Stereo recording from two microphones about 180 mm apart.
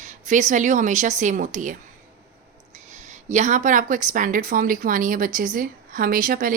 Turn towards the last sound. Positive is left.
turn(degrees=-50)  # may be behind; listen again after turning